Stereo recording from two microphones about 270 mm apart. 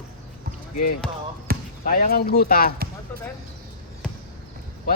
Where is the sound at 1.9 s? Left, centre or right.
Left.